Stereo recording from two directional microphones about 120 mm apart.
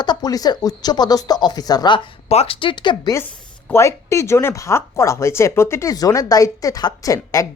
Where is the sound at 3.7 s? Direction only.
20° left (ahead or behind).